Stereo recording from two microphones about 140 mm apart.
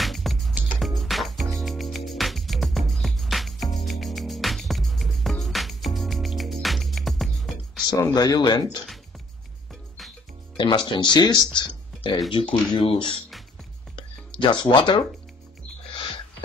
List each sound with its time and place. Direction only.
0.0 s music: centre (ahead or behind)
7.9 s speech: 30° left (ahead or behind)
10.6 s speech: 35° left (ahead or behind)
11.5 s a sound: 35° left (ahead or behind)
12.3 s speech: 35° left (ahead or behind)
14.4 s speech: 35° left (ahead or behind)
15.9 s a sound: 35° left (ahead or behind)